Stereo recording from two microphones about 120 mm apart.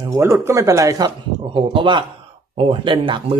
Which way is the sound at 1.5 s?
45° right (ahead or behind).